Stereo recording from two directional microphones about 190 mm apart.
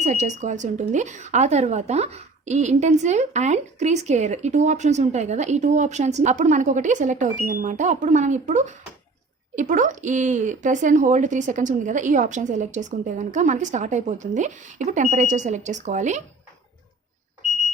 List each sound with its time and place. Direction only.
0.0 s speech: 40° right (ahead or behind)